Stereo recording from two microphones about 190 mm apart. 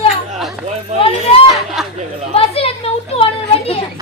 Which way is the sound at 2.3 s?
30° left (ahead or behind).